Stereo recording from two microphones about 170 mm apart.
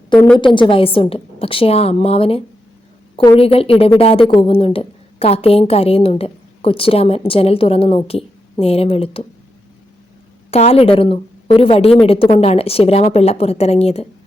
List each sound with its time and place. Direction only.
0.3 s a woman's voice: 30° left (ahead or behind)
10.5 s a woman's voice: 35° left (ahead or behind)